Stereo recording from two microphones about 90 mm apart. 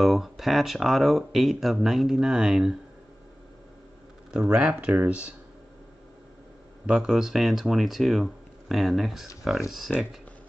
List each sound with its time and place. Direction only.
0.0 s speech: centre (ahead or behind)
4.3 s speech: 10° right (ahead or behind)
6.9 s speech: 5° right (ahead or behind)